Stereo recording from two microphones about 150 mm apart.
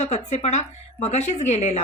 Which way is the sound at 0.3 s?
50° left (ahead or behind).